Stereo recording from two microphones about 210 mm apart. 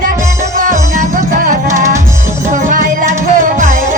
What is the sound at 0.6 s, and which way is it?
Music, 40° right (ahead or behind).